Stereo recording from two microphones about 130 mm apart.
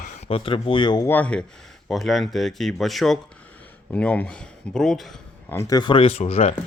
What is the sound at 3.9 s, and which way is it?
Speech, 10° left (ahead or behind).